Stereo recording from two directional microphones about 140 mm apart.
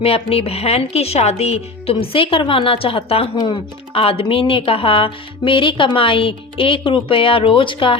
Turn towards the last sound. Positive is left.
turn(degrees=40)  # may be behind; listen again after turning